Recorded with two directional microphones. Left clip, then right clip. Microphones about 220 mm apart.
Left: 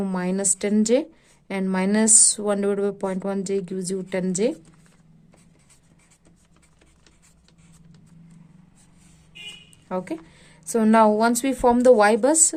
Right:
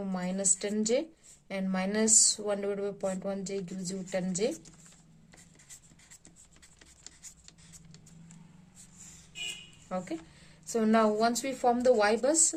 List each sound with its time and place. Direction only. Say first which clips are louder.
0.0 s speech: left 8 dB; 50° left (ahead or behind)
9.9 s speech: left 7 dB; 45° left (ahead or behind)